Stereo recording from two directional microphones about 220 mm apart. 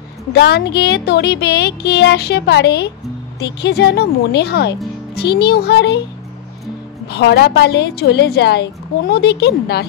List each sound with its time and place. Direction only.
0.3 s speech: 50° left (ahead or behind)
7.1 s speech: 50° left (ahead or behind)